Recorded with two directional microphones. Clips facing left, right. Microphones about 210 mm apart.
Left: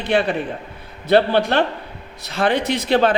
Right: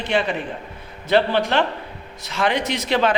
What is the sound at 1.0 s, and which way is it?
Speech, 60° left (ahead or behind).